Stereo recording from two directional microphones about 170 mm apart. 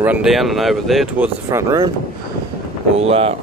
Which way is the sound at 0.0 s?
5° right (ahead or behind).